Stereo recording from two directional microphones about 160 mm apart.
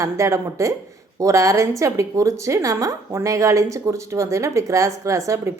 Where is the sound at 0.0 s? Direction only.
20° right (ahead or behind).